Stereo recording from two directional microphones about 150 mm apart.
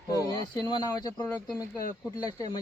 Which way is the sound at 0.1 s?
25° left (ahead or behind).